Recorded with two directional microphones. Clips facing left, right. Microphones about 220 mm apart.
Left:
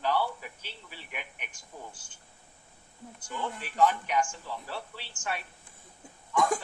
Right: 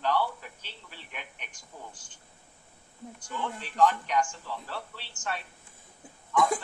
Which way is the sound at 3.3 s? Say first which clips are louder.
Even; 10° left (ahead or behind).